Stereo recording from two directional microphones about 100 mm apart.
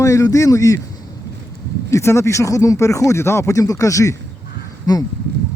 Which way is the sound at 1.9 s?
25° left (ahead or behind).